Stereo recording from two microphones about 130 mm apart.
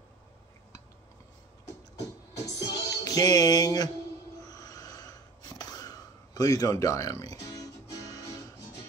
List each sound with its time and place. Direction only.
2.4 s music: 25° left (ahead or behind)
4.5 s wheeze: 30° left (ahead or behind)